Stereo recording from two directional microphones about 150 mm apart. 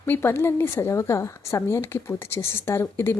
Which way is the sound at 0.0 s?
15° left (ahead or behind).